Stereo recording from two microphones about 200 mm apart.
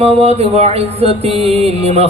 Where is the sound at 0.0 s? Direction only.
30° right (ahead or behind).